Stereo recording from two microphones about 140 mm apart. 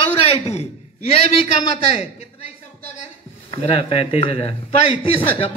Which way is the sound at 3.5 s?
45° left (ahead or behind).